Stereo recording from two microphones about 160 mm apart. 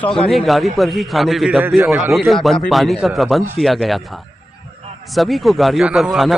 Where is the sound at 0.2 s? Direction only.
Centre (ahead or behind).